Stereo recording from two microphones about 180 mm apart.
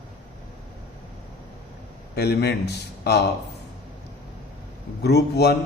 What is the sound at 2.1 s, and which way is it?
A man's voice, 65° left (ahead or behind).